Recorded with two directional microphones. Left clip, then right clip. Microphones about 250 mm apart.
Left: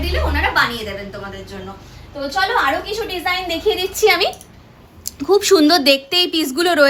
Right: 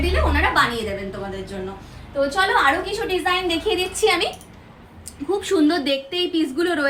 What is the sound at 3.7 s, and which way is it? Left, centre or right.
Speech, left.